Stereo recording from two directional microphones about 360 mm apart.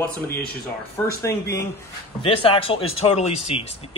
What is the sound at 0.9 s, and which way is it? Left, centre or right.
Speech, centre.